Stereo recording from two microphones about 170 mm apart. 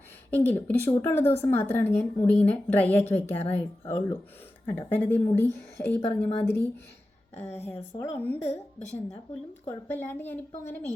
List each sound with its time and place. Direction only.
0.3 s a woman's voice: 10° left (ahead or behind)
7.4 s speech: 40° left (ahead or behind)
7.7 s a woman's voice: 15° left (ahead or behind)
9.6 s a woman's voice: 10° left (ahead or behind)